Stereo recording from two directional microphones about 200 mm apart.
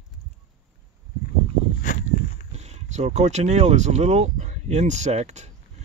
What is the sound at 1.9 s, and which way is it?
Walk, 40° left (ahead or behind).